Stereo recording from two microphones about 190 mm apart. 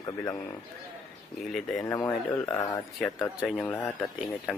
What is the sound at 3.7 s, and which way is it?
Speech, 10° left (ahead or behind).